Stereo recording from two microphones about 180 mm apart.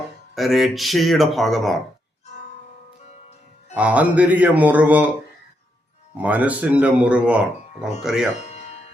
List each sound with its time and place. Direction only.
0.3 s speech: centre (ahead or behind)
3.8 s speech: 5° right (ahead or behind)
6.2 s speech: 10° right (ahead or behind)
8.4 s music: 40° left (ahead or behind)